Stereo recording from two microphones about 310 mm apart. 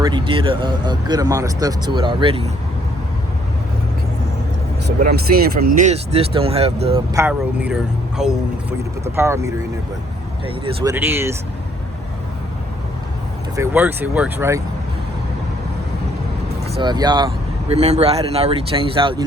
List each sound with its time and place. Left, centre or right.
0.0 s speech: centre
4.9 s speech: right; by 11.3 s centre
13.6 s speech: centre
16.6 s speech: centre